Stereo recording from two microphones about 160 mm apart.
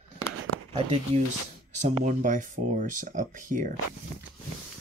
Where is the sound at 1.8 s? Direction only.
50° right (ahead or behind).